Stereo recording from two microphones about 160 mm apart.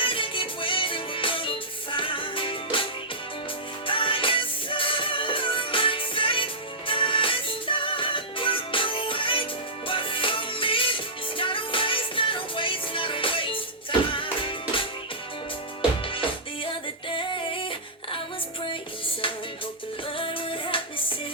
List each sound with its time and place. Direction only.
0.0 s music: 35° left (ahead or behind)
16.0 s music: 35° left (ahead or behind)